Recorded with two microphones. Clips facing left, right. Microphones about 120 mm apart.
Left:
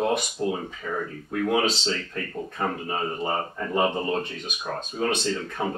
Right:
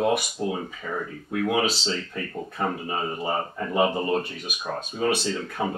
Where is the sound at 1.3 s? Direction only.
5° right (ahead or behind).